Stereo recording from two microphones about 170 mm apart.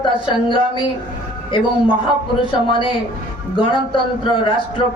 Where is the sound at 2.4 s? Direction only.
30° left (ahead or behind).